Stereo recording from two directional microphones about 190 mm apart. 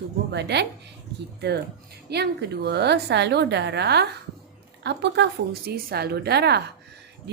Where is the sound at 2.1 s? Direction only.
60° right (ahead or behind).